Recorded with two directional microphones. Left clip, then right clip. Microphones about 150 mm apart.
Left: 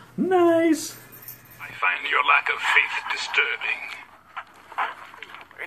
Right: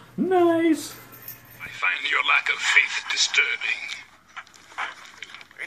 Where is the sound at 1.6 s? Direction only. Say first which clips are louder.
Left 1 dB; 30° right (ahead or behind).